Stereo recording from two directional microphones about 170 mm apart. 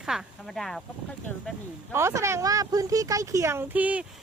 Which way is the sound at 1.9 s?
15° right (ahead or behind).